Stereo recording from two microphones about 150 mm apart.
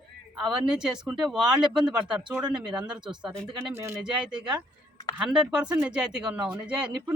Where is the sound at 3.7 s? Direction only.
15° right (ahead or behind).